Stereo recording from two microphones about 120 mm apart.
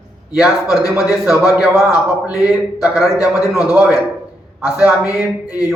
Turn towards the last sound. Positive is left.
turn(degrees=-5)  # may be behind; listen again after turning